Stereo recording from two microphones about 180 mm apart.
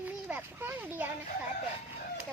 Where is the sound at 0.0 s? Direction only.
10° right (ahead or behind).